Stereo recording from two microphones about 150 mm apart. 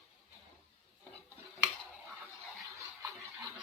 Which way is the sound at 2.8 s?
20° right (ahead or behind).